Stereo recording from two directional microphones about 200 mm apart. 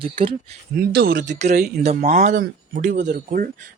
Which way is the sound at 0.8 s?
50° right (ahead or behind).